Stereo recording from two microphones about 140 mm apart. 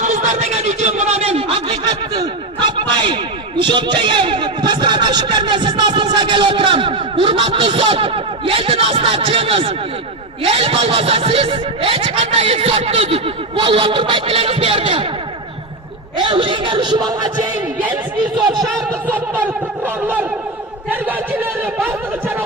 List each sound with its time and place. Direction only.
0.0 s a sound: 60° right (ahead or behind); by 3.2 s 35° right (ahead or behind)
3.6 s speech: 35° right (ahead or behind)
16.3 s speech: 35° right (ahead or behind)
18.5 s speech: centre (ahead or behind)
19.1 s fowl: 15° right (ahead or behind)